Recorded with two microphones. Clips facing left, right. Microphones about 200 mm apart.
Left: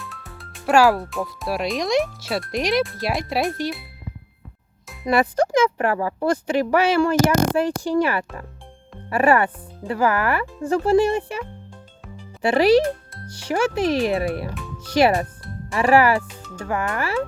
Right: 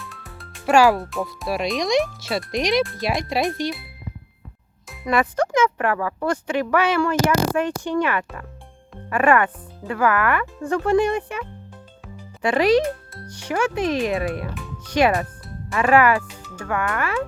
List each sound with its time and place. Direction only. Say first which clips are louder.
0.0 s speech: left 1 dB; centre (ahead or behind)
5.0 s a child's voice: left 2 dB; 35° left (ahead or behind)